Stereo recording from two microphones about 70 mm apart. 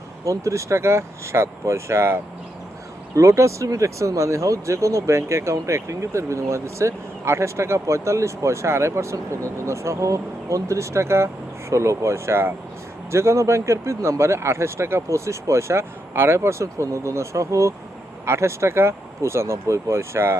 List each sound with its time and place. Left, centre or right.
0.3 s speech: right
3.2 s speech: right